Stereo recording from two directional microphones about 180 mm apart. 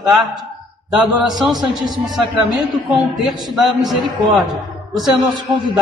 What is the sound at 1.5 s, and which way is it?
Speech, 25° right (ahead or behind).